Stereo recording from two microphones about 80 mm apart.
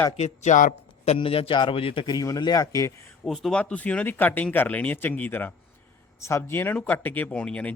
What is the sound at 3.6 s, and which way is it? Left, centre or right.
Speech, centre.